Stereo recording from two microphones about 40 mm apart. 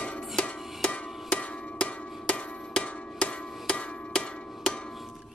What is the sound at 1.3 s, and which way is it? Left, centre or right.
Percussion, left.